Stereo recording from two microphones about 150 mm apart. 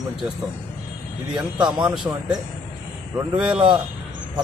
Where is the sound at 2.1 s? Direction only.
20° right (ahead or behind).